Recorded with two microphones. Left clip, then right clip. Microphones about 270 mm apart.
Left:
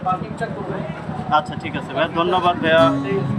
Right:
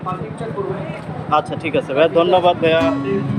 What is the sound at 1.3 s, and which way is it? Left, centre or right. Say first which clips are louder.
Speech: right 2 dB; centre.